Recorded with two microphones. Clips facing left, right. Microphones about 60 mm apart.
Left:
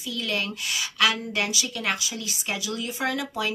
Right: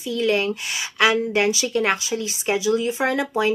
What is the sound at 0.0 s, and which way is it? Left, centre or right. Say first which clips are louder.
Speech: right 8 dB; right.